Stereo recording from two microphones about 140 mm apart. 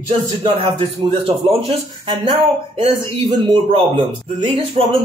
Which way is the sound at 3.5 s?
35° right (ahead or behind).